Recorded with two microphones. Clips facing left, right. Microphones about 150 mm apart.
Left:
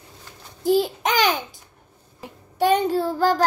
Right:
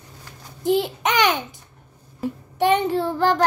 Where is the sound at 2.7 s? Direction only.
35° left (ahead or behind).